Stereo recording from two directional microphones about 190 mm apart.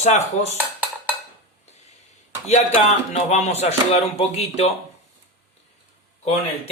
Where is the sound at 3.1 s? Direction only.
35° left (ahead or behind).